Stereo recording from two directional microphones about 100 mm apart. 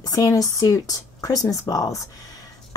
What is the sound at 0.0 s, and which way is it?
Speech, 40° left (ahead or behind).